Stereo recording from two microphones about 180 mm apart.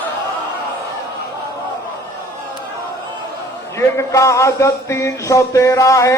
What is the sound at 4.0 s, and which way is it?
Music, 15° left (ahead or behind).